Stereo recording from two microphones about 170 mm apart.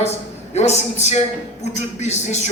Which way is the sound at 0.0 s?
40° left (ahead or behind).